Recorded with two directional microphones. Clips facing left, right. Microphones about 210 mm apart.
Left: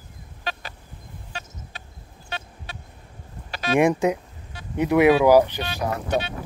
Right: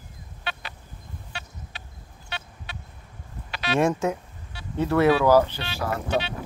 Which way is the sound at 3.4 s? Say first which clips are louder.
Left 3 dB; 45° left (ahead or behind).